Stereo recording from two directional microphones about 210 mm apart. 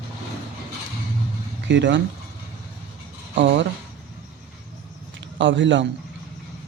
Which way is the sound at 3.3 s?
60° right (ahead or behind).